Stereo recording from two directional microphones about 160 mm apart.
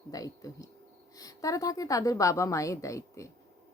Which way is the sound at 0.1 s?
20° left (ahead or behind).